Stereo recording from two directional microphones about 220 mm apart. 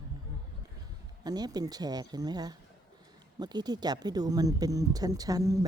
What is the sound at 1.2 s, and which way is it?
Speech, 15° right (ahead or behind).